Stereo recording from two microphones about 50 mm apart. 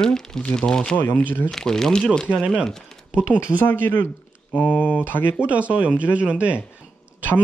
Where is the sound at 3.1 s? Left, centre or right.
Right.